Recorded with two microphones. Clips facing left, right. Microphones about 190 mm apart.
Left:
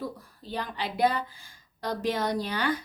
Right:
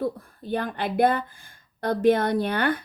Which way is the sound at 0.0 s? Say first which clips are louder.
Right 8 dB; 55° right (ahead or behind).